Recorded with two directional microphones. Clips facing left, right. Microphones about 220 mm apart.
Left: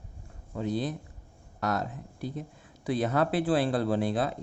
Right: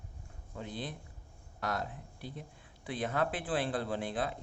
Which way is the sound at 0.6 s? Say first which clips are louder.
Left 12 dB; 40° left (ahead or behind).